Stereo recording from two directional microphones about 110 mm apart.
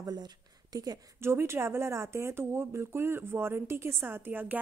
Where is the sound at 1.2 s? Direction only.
20° right (ahead or behind).